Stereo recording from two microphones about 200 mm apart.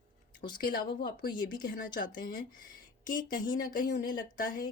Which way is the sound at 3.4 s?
20° left (ahead or behind).